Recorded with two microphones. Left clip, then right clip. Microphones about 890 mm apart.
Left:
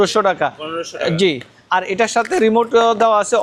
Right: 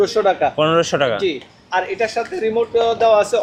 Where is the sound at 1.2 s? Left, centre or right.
Left.